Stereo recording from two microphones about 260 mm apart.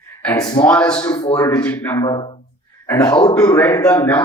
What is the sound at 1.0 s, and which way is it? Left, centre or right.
Speech, centre.